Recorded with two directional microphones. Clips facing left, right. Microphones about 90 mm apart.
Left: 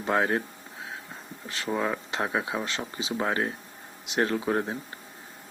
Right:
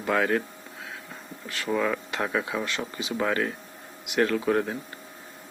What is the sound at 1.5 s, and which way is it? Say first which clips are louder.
Speech: right 2 dB; 25° left (ahead or behind).